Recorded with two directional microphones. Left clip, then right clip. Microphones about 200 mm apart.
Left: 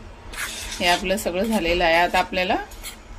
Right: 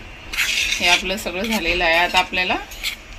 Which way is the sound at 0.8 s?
35° left (ahead or behind).